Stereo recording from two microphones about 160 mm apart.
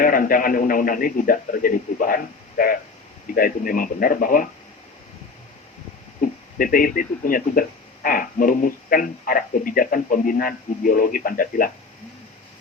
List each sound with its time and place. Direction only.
0.0 s speech: 60° left (ahead or behind)
6.2 s a sound: 60° left (ahead or behind)
6.6 s speech: 60° left (ahead or behind)